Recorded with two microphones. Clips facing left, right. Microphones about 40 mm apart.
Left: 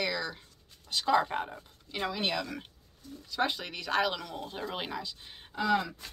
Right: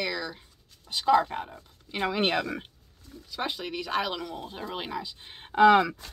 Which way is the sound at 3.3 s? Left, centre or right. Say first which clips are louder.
Left 1 dB; centre.